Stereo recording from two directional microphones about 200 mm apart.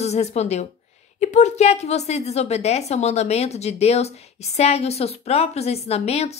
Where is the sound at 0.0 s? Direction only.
35° left (ahead or behind).